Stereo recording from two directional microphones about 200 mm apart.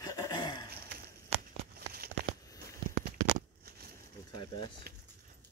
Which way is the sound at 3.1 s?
50° right (ahead or behind).